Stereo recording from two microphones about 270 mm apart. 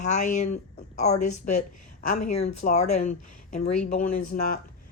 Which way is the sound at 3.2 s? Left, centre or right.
Left.